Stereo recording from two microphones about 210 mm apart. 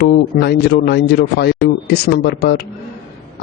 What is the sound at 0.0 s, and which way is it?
Speech, 50° left (ahead or behind).